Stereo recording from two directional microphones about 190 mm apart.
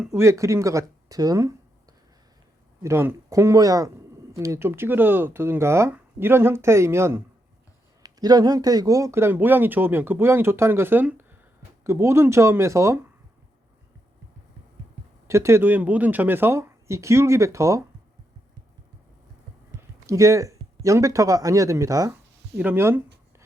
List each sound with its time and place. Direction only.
0.1 s speech: 15° right (ahead or behind)
15.3 s speech: 15° right (ahead or behind)
20.1 s speech: 15° right (ahead or behind)